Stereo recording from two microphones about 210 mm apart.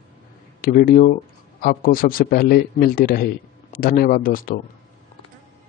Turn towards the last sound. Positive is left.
turn(degrees=40)  # may be behind; listen again after turning